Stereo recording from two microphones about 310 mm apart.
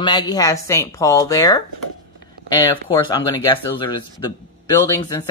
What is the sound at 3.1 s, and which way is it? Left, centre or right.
Speech, centre.